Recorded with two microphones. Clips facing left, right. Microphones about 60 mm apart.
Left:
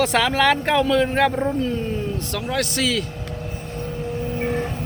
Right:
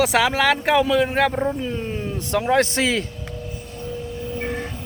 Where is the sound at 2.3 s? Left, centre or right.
Right.